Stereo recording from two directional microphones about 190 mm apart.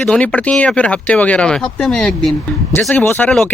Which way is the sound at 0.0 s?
5° left (ahead or behind).